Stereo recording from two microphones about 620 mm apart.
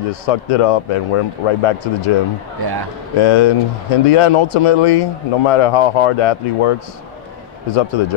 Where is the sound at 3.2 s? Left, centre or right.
Left.